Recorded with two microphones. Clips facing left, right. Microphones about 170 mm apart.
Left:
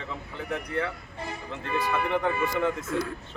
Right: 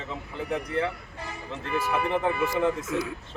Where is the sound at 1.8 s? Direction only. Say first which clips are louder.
Right 1 dB; 5° right (ahead or behind).